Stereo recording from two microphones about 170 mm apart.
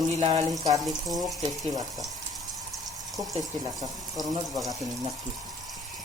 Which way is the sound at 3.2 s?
20° right (ahead or behind).